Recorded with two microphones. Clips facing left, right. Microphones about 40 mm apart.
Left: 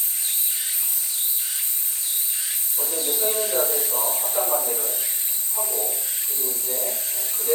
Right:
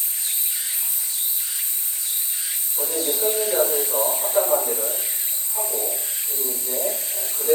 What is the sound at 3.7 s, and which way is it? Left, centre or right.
Speech, right.